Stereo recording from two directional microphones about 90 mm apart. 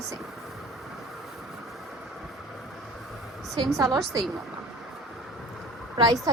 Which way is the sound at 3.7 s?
40° right (ahead or behind).